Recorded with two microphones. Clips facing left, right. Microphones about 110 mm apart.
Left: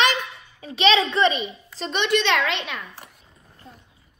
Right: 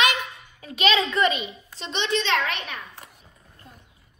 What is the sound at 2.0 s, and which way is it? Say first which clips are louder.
Speech: left 3 dB; 70° left (ahead or behind).